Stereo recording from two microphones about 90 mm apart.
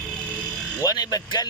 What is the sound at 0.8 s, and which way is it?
Speech, 45° left (ahead or behind).